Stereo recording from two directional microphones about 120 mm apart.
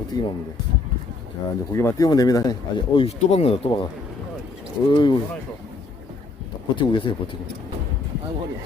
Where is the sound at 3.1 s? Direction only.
60° left (ahead or behind).